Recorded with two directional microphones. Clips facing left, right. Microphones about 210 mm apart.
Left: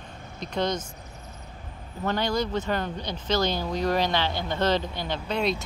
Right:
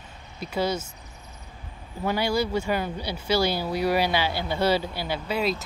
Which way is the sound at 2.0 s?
10° right (ahead or behind).